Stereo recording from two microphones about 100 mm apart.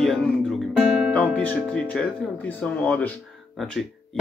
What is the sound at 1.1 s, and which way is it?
Speech, 15° left (ahead or behind).